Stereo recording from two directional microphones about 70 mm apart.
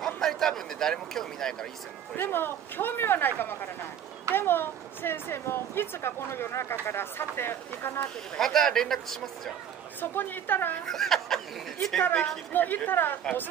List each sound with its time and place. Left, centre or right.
0.0 s a sound: centre
2.1 s speech: left
8.4 s a man's voice: centre
9.9 s a woman's voice: left
10.9 s a man's voice: centre
12.5 s a woman's voice: left